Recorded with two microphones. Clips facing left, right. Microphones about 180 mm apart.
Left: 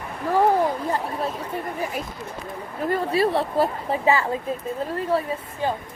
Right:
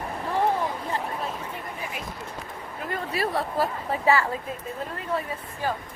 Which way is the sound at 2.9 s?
30° left (ahead or behind).